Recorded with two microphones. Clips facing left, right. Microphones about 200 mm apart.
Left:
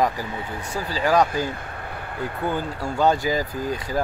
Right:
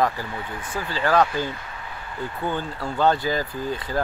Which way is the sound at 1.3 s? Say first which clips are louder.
Left 1 dB; 45° left (ahead or behind).